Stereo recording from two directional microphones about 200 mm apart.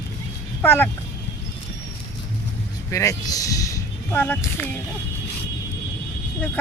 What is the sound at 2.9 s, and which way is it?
Speech, 15° left (ahead or behind).